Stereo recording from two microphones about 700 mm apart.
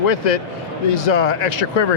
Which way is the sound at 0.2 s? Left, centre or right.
Left.